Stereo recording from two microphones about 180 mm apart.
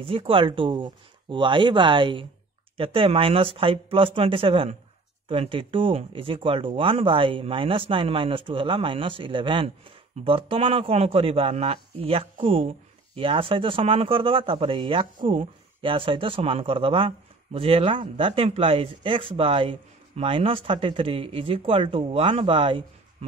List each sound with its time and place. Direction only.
0.0 s a man's voice: 30° right (ahead or behind)